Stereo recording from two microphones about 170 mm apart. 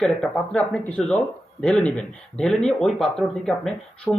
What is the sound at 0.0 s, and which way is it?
Speech, 5° left (ahead or behind).